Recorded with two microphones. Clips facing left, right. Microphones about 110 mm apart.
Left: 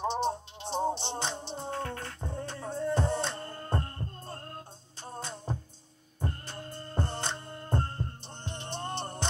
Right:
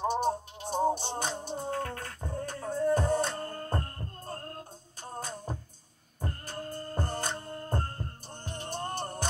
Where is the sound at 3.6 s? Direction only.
25° left (ahead or behind).